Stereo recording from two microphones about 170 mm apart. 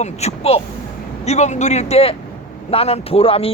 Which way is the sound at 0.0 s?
40° left (ahead or behind).